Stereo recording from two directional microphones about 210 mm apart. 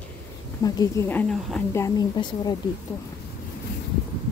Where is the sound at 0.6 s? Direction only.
15° left (ahead or behind).